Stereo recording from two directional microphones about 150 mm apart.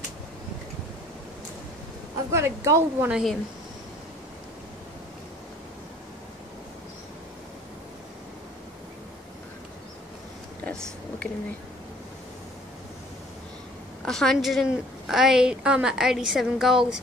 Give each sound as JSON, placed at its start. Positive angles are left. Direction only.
{"t": 2.3, "sound": "a woman's voice", "side_deg": -20}
{"t": 3.1, "sound": "a woman's voice", "side_deg": -5}
{"t": 10.6, "sound": "a sound", "side_deg": 10}
{"t": 14.0, "sound": "a woman's voice", "side_deg": 5}